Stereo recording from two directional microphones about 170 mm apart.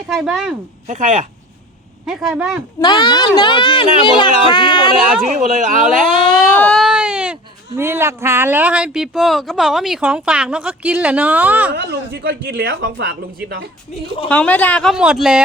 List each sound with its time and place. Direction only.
0.1 s speech: centre (ahead or behind)
0.9 s speech: 50° right (ahead or behind)
2.0 s speech: 5° right (ahead or behind)
2.8 s speech: 25° left (ahead or behind)
4.9 s speech: 5° right (ahead or behind)
5.2 s speech: 50° right (ahead or behind)
6.3 s baby cry: 5° left (ahead or behind)
7.8 s speech: 15° right (ahead or behind)
11.8 s a woman's voice: 75° right (ahead or behind)
14.3 s speech: 10° left (ahead or behind)